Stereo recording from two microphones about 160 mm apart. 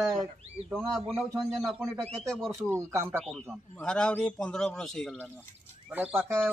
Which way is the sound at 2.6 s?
15° right (ahead or behind).